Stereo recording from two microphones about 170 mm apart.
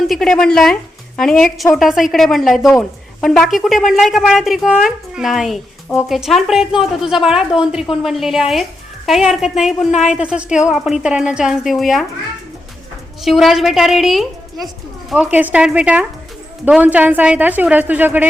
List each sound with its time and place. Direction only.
0.1 s a woman's voice: centre (ahead or behind)
13.2 s a woman's voice: centre (ahead or behind)